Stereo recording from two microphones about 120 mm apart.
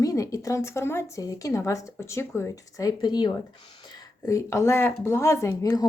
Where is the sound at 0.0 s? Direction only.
30° left (ahead or behind).